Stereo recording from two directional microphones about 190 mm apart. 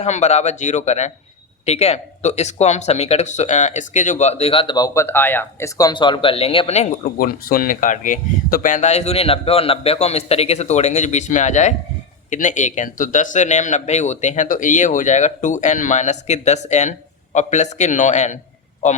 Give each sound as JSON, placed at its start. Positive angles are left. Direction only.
{"t": 0.0, "sound": "speech", "side_deg": 35}